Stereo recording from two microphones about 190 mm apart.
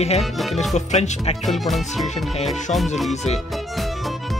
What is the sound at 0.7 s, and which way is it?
Speech, 35° left (ahead or behind).